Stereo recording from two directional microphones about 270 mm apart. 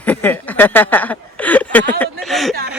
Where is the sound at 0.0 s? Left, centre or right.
Centre.